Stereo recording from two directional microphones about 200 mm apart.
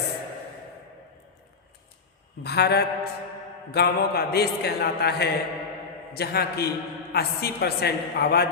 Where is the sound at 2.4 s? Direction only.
55° left (ahead or behind).